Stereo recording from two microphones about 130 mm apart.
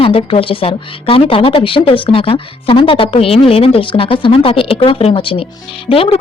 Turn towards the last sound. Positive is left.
turn(degrees=45)  # may be behind; listen again after turning